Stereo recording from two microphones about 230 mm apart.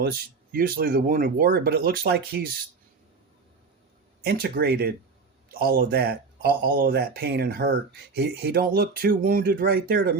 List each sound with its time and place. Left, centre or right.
0.5 s speech: right
4.2 s speech: right